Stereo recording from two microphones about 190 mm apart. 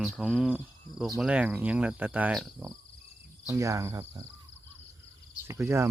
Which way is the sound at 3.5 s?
15° right (ahead or behind).